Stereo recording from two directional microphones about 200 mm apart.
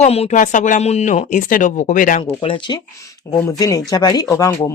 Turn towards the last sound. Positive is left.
turn(degrees=15)  # may be behind; listen again after turning